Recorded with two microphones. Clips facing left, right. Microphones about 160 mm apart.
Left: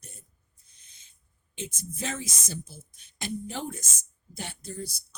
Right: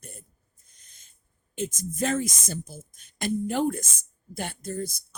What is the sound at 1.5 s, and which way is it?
Speech, 50° right (ahead or behind).